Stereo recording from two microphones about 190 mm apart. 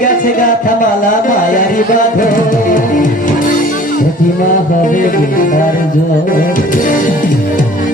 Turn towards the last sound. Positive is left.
turn(degrees=45)  # may be behind; listen again after turning